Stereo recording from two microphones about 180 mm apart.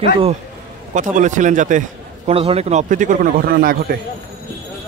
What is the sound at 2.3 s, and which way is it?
A man's voice, 35° right (ahead or behind).